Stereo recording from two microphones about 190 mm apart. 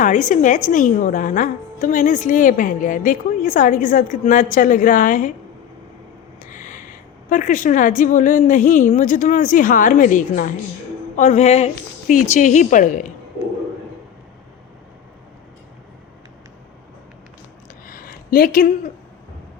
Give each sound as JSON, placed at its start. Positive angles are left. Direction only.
{"t": 0.0, "sound": "a woman's voice", "side_deg": 40}
{"t": 6.4, "sound": "a woman's voice", "side_deg": 45}
{"t": 17.8, "sound": "a sound", "side_deg": 50}